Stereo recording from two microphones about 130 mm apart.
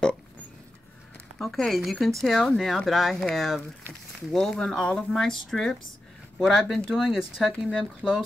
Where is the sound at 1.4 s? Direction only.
Centre (ahead or behind).